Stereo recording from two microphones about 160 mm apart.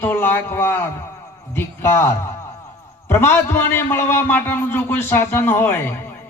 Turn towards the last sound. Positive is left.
turn(degrees=15)  # may be behind; listen again after turning